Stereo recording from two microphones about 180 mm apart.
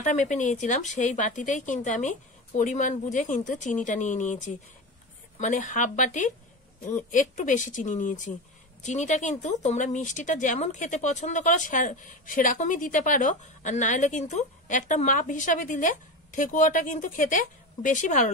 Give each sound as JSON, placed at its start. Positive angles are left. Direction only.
{"t": 0.0, "sound": "speech", "side_deg": 45}